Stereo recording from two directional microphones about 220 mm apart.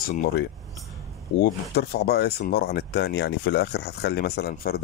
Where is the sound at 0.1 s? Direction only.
40° left (ahead or behind).